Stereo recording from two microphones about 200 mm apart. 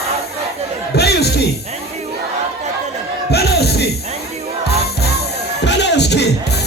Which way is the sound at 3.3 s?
55° left (ahead or behind).